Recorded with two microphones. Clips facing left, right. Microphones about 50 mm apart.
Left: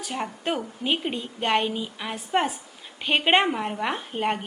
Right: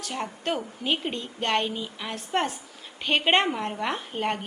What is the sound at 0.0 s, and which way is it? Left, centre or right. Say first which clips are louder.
A woman's voice: left 2 dB; centre.